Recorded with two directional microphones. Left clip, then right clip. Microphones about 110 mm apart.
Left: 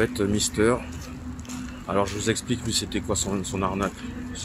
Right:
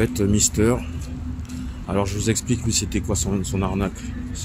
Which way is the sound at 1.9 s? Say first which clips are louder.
Right 1 dB; 25° right (ahead or behind).